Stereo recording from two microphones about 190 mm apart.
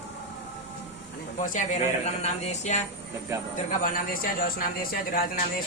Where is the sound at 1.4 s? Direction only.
40° left (ahead or behind).